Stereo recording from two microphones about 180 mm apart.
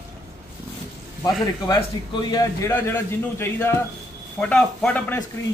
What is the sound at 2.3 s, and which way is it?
Speech, 20° left (ahead or behind).